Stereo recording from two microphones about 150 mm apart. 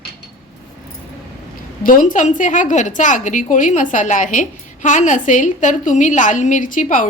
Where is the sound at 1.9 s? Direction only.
65° left (ahead or behind).